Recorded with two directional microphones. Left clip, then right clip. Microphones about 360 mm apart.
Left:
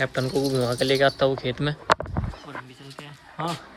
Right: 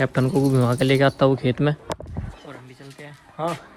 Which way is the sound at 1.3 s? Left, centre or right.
Centre.